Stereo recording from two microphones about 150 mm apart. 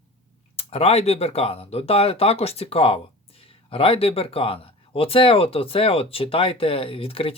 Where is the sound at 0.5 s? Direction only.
40° left (ahead or behind).